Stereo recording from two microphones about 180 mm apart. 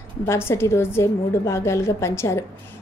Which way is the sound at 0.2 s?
15° left (ahead or behind).